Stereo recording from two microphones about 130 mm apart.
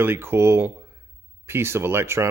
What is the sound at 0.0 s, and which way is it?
Speech, 20° right (ahead or behind).